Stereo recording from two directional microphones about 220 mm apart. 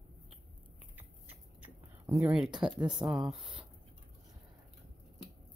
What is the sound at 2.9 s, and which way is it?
Speech, centre (ahead or behind).